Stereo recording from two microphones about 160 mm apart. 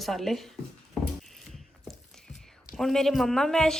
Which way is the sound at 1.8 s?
Centre (ahead or behind).